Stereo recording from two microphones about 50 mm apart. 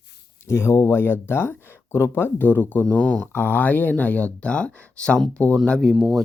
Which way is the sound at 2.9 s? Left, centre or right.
Left.